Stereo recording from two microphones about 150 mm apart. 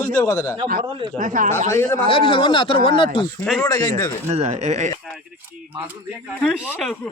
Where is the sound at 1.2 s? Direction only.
60° right (ahead or behind).